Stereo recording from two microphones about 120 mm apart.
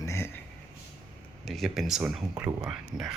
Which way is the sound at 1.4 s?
Centre (ahead or behind).